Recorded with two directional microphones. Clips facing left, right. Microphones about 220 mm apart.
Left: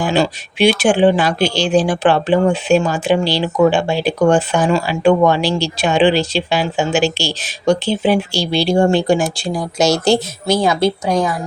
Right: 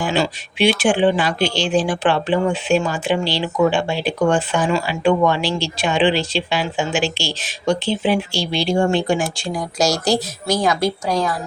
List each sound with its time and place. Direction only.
0.0 s speech: 40° left (ahead or behind); by 11.3 s 20° left (ahead or behind)